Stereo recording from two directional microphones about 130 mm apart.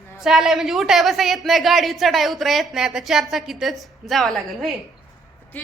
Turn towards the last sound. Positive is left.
turn(degrees=0)  # may be behind; listen again after turning